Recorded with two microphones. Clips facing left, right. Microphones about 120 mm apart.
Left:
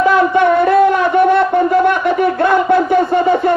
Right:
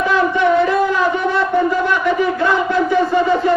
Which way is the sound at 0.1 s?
50° left (ahead or behind).